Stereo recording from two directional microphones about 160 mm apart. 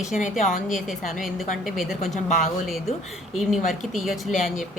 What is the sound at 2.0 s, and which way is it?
Speech, 50° left (ahead or behind).